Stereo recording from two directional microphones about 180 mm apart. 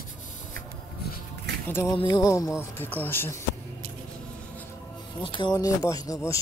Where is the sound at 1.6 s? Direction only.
15° left (ahead or behind).